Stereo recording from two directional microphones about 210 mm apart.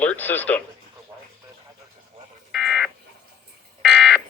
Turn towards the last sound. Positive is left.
turn(degrees=0)  # may be behind; listen again after turning